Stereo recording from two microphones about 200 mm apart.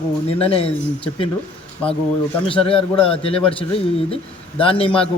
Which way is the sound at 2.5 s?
30° left (ahead or behind).